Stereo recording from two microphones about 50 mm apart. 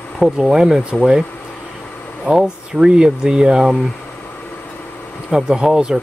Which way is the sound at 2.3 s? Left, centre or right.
Centre.